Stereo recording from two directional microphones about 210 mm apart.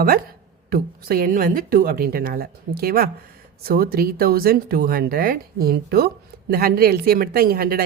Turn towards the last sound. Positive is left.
turn(degrees=-45)  # may be behind; listen again after turning